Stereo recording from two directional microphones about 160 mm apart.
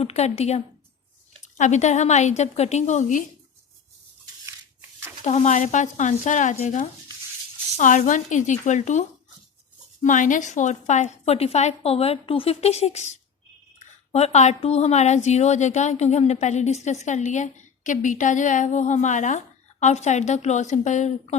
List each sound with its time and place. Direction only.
0.0 s a woman's voice: 40° left (ahead or behind)
5.2 s a woman's voice: 45° left (ahead or behind)